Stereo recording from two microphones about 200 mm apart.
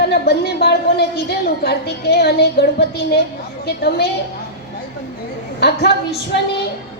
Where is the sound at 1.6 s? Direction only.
55° left (ahead or behind).